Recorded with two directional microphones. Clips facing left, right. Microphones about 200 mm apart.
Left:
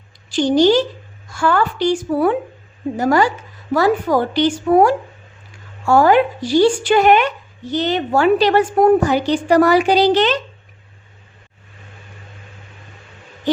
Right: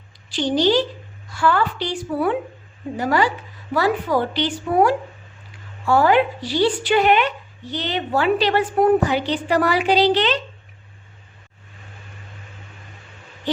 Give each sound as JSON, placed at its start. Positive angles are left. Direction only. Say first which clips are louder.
{"t": 0.3, "sound": "speech", "louder": "left 5 dB", "side_deg": 45}